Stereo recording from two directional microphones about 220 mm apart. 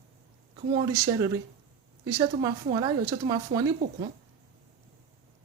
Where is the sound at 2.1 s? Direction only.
20° right (ahead or behind).